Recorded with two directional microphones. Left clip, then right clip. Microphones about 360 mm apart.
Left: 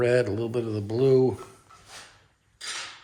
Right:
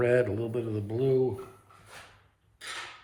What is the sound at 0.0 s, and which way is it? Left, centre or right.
Speech, centre.